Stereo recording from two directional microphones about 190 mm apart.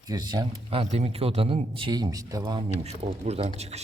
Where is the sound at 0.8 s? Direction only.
35° right (ahead or behind).